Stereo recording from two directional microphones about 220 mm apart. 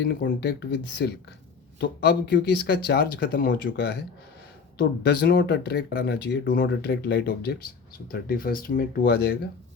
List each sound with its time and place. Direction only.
0.0 s speech: 50° left (ahead or behind)